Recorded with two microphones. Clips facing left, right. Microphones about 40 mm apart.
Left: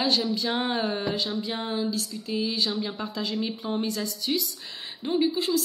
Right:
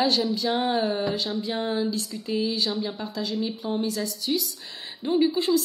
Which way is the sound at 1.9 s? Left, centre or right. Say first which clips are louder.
Right 1 dB; centre.